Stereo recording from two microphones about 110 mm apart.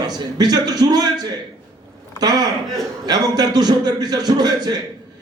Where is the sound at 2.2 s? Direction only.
35° right (ahead or behind).